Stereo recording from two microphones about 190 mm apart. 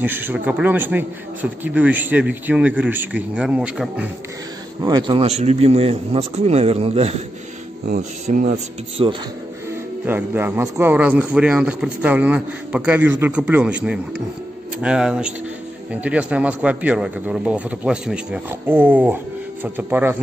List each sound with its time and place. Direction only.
0.0 s a man's voice: 10° right (ahead or behind)
4.8 s a man's voice: 25° right (ahead or behind)
8.3 s a man's voice: 40° right (ahead or behind)
9.0 s speech: 25° right (ahead or behind)
10.0 s a man's voice: 10° right (ahead or behind)